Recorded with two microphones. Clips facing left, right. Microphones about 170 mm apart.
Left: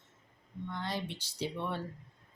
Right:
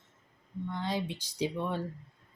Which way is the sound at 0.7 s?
15° right (ahead or behind).